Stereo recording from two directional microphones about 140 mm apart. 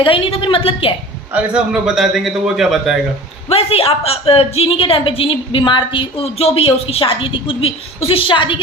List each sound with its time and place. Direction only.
0.0 s a woman's voice: 40° left (ahead or behind)
1.3 s a man's voice: 10° right (ahead or behind)
3.5 s a woman's voice: 45° left (ahead or behind)